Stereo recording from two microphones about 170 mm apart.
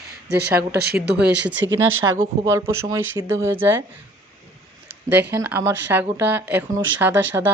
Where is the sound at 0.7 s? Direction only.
75° right (ahead or behind).